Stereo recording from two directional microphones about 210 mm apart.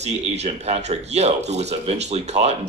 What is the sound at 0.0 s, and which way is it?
Speech, 30° right (ahead or behind).